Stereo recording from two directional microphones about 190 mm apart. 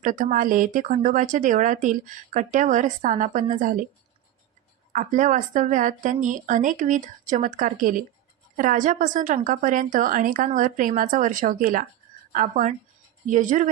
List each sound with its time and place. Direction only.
0.0 s a woman's voice: 45° right (ahead or behind)
4.9 s a woman's voice: 40° right (ahead or behind)